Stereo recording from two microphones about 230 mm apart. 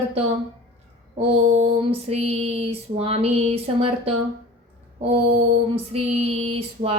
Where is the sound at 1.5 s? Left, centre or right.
Right.